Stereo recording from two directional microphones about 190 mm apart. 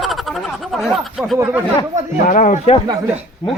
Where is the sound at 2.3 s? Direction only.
45° left (ahead or behind).